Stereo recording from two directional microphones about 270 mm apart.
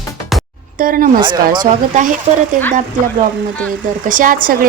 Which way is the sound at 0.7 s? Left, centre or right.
Right.